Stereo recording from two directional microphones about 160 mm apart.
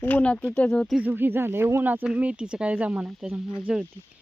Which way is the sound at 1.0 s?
10° right (ahead or behind).